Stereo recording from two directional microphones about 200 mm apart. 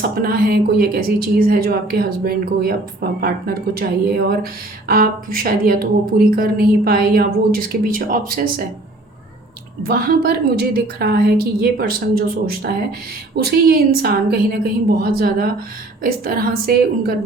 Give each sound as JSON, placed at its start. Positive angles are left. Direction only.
{"t": 0.1, "sound": "a woman's voice", "side_deg": -45}
{"t": 9.8, "sound": "a woman's voice", "side_deg": -50}